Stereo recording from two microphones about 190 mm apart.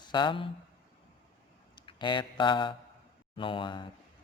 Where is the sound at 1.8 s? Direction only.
25° left (ahead or behind).